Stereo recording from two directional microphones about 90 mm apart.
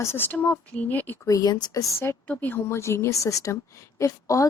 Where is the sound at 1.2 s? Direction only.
40° left (ahead or behind).